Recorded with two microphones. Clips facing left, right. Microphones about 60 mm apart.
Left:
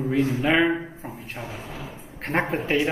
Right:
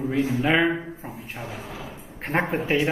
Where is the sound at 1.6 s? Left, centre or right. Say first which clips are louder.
Even; right.